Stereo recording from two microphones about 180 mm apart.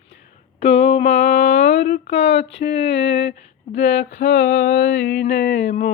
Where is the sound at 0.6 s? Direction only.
35° left (ahead or behind).